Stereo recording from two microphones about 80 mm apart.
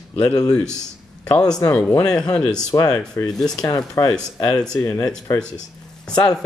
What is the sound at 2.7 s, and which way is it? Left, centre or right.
Speech, left.